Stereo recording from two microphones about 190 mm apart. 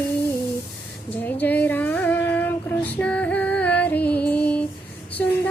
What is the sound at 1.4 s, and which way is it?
Music, 10° left (ahead or behind).